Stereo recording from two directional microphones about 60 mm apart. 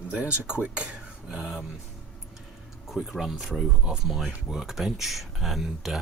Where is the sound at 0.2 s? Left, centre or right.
Centre.